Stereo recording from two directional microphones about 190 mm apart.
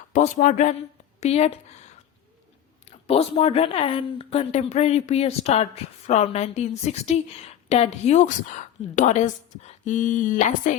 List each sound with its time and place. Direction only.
0.1 s a woman's voice: 40° left (ahead or behind)